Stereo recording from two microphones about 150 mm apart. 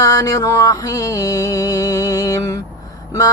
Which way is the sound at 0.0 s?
25° left (ahead or behind).